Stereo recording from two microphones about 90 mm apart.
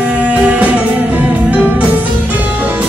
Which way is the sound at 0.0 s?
15° right (ahead or behind).